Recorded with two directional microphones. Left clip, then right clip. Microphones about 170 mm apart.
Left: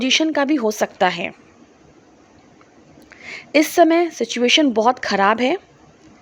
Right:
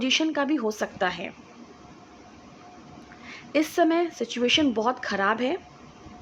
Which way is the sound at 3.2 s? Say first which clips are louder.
Left 9 dB; 45° left (ahead or behind).